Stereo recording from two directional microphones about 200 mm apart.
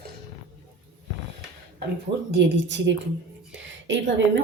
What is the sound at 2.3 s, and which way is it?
A woman's voice, 60° right (ahead or behind).